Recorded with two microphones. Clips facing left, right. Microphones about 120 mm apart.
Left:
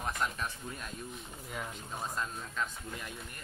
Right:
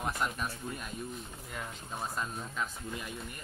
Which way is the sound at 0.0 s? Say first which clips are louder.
Right 1 dB; 5° right (ahead or behind).